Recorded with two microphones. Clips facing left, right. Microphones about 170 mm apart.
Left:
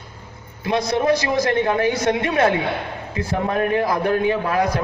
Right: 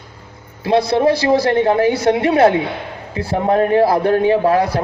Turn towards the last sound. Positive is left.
turn(degrees=-30)  # may be behind; listen again after turning